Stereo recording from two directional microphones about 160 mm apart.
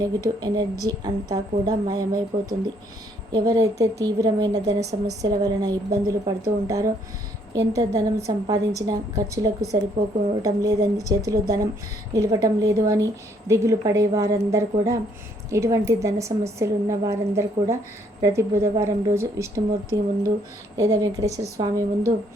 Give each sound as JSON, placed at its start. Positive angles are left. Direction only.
{"t": 0.0, "sound": "a woman's voice", "side_deg": -25}